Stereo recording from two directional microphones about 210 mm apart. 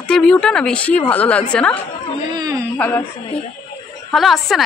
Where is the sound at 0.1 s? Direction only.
5° left (ahead or behind).